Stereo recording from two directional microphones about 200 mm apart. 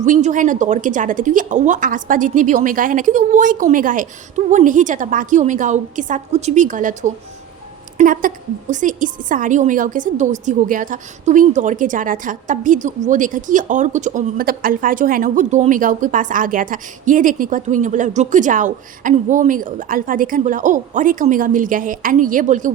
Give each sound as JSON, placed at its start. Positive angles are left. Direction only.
{"t": 0.0, "sound": "a woman's voice", "side_deg": -40}